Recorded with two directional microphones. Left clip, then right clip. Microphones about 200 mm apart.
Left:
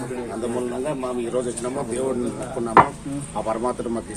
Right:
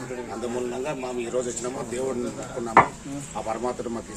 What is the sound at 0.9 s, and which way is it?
Speech, 10° right (ahead or behind).